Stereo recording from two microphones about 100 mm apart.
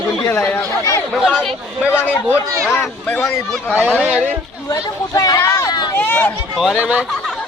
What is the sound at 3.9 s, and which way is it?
Speech, 15° right (ahead or behind).